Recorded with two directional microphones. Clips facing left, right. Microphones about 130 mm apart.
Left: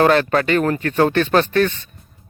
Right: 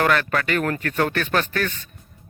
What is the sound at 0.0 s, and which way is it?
A man's voice, 30° left (ahead or behind).